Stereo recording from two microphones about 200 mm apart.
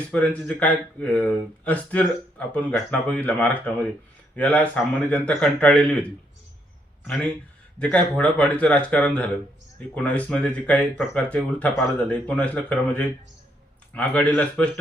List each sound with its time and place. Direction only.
0.1 s a man's voice: 5° left (ahead or behind)